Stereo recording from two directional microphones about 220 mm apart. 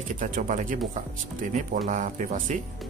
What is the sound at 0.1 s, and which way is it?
Speech, 35° right (ahead or behind).